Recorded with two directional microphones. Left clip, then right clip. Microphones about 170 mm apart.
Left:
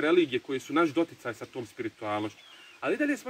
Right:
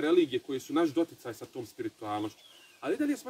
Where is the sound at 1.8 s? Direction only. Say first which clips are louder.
Left 3 dB; 10° right (ahead or behind).